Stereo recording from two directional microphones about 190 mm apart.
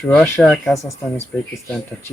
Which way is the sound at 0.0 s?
5° left (ahead or behind).